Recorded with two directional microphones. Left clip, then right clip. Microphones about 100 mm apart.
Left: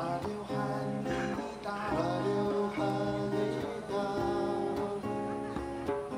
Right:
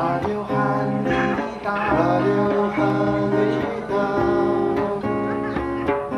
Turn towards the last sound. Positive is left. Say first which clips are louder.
# right 12 dB
turn(degrees=20)  # may be behind; listen again after turning